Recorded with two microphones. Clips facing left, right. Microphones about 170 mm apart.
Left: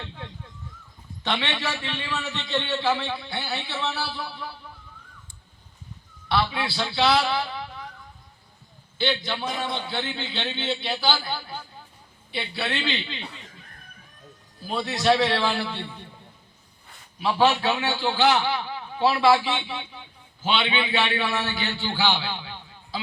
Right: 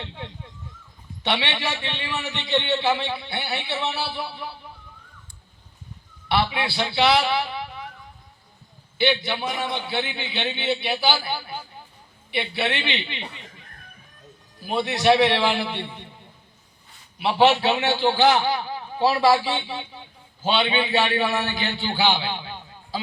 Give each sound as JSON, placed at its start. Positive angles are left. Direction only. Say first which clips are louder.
{"t": 0.0, "sound": "a man's voice", "louder": "right 2 dB", "side_deg": -20}
{"t": 6.3, "sound": "a man's voice", "louder": "right 2 dB", "side_deg": -20}
{"t": 9.0, "sound": "a man's voice", "louder": "right 4 dB", "side_deg": -15}
{"t": 14.6, "sound": "a man's voice", "louder": "right 3 dB", "side_deg": -20}
{"t": 17.2, "sound": "a man's voice", "louder": "right 3 dB", "side_deg": -20}
{"t": 18.3, "sound": "a man's voice", "louder": "right 2 dB", "side_deg": -40}
{"t": 21.4, "sound": "a man's voice", "louder": "right 2 dB", "side_deg": -15}